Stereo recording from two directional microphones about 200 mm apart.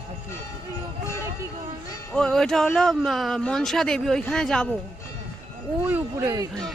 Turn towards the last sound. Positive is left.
turn(degrees=-10)  # may be behind; listen again after turning